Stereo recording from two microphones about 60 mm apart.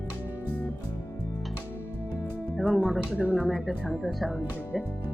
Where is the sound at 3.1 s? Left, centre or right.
Right.